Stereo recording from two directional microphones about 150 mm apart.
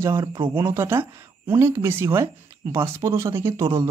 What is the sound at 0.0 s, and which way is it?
Speech, 20° right (ahead or behind).